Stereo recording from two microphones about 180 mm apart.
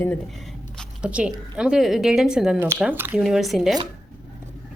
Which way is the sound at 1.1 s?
5° right (ahead or behind).